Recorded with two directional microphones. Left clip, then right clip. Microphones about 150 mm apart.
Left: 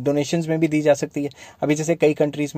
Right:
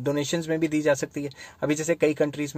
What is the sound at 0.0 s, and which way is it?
Speech, 30° left (ahead or behind).